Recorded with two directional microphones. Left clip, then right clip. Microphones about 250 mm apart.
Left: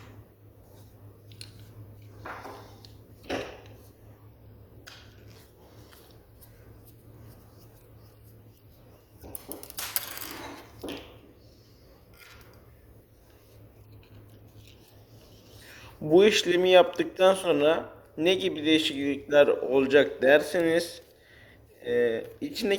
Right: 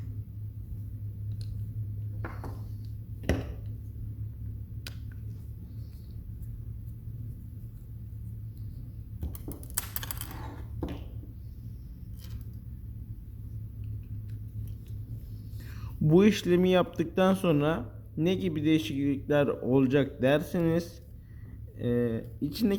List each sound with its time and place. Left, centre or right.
15.6 s speech: centre